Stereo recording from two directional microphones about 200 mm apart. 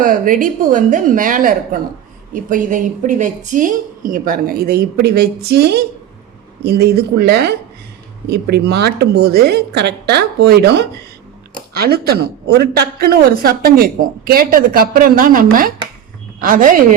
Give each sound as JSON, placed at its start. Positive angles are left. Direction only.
{"t": 0.0, "sound": "a woman's voice", "side_deg": -45}